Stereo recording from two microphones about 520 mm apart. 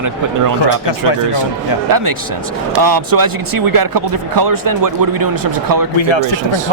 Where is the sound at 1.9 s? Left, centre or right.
Right.